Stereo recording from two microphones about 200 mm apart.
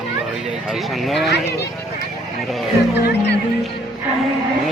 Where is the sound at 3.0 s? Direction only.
55° left (ahead or behind).